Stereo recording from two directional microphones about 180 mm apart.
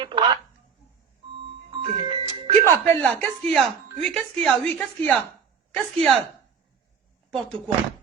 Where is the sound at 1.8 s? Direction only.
30° right (ahead or behind).